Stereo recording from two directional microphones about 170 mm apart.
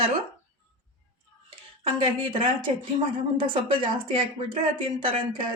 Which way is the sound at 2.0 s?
30° right (ahead or behind).